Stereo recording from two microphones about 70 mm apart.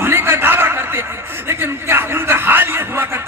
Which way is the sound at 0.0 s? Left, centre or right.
Right.